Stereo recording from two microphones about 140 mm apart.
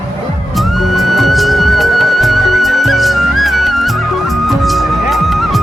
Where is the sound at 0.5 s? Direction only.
Centre (ahead or behind).